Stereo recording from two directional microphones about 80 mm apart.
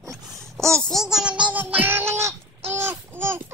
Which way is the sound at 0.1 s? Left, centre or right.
Centre.